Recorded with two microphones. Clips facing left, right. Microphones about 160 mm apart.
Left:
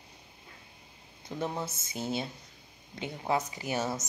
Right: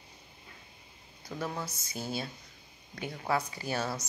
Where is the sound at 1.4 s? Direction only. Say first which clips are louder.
Left 3 dB; 25° left (ahead or behind).